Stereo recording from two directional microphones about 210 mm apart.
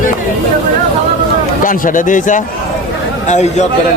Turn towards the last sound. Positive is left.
turn(degrees=35)  # may be behind; listen again after turning